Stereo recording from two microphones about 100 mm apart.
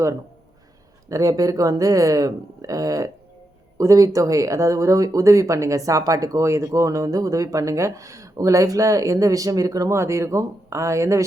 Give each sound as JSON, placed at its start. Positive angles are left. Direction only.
{"t": 1.1, "sound": "speech", "side_deg": -35}